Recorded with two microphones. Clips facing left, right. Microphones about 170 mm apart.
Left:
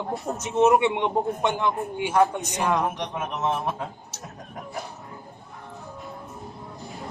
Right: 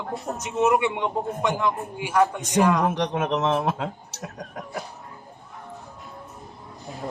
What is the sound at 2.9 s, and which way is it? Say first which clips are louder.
A man's voice: right 7 dB; 90° right.